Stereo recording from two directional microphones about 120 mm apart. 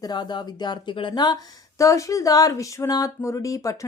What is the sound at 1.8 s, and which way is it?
A woman's voice, 25° left (ahead or behind).